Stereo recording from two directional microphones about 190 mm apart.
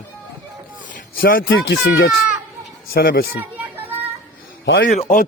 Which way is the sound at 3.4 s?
10° right (ahead or behind).